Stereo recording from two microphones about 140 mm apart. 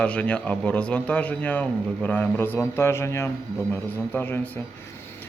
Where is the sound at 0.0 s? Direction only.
10° left (ahead or behind).